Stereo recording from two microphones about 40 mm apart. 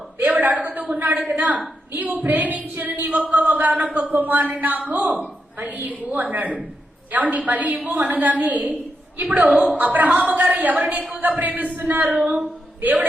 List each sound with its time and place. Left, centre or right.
0.3 s a sound: right
0.9 s a woman's voice: right
9.7 s speech: right
10.1 s speech: right
10.3 s a woman's voice: right